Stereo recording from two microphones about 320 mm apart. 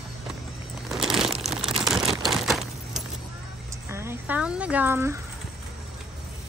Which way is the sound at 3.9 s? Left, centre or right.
Centre.